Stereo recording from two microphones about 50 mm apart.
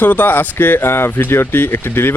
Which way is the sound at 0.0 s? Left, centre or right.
Left.